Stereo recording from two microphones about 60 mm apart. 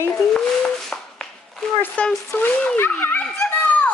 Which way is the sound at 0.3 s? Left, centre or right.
Centre.